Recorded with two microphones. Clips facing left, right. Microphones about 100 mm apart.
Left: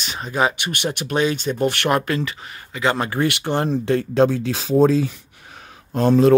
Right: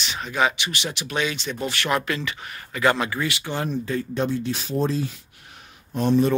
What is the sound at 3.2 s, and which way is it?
Speech, 60° left (ahead or behind).